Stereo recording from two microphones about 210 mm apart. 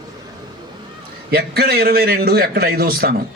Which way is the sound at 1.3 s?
50° right (ahead or behind).